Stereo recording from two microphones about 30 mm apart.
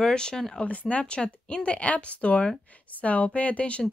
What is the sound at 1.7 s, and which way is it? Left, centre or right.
Speech, left.